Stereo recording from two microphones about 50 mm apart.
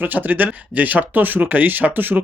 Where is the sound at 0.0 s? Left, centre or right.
Right.